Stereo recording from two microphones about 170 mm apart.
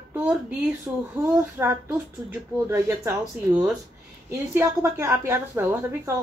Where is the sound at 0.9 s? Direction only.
10° right (ahead or behind).